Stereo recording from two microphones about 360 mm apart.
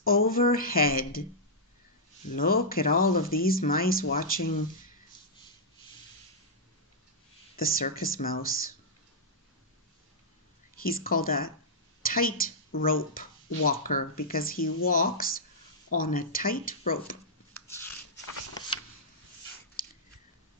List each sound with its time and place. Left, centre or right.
0.0 s speech: left
2.3 s speech: left
7.5 s speech: left
10.8 s speech: left
18.7 s a sound: centre